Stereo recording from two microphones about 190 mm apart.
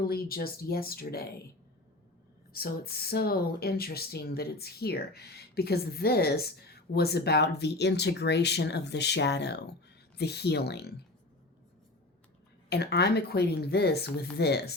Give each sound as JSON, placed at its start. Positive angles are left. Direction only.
{"t": 0.0, "sound": "speech", "side_deg": 50}
{"t": 2.5, "sound": "speech", "side_deg": 55}
{"t": 12.7, "sound": "speech", "side_deg": 60}